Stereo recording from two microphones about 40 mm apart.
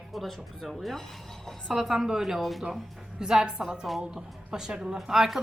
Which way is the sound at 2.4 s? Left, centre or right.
Centre.